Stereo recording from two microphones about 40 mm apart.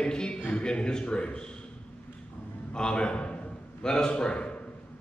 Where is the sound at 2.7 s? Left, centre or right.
Left.